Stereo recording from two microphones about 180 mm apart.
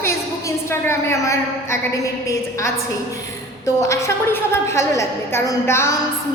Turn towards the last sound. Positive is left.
turn(degrees=15)  # may be behind; listen again after turning